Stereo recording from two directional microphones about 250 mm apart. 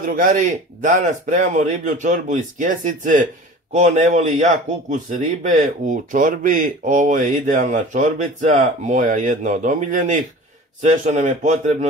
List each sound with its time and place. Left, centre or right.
0.0 s speech: right